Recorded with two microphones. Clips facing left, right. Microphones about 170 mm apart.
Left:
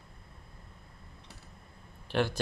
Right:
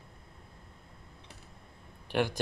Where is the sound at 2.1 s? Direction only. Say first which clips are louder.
Even; 15° right (ahead or behind).